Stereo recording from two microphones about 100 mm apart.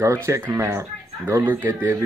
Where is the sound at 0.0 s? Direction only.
30° right (ahead or behind).